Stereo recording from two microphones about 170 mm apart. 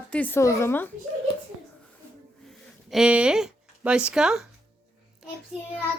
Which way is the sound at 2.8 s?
5° right (ahead or behind).